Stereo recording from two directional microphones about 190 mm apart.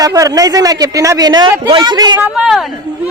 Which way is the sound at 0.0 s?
20° right (ahead or behind).